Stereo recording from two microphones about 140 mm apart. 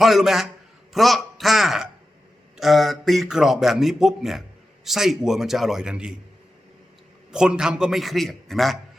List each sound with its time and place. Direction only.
0.0 s a man's voice: centre (ahead or behind)
7.3 s speech: 5° right (ahead or behind)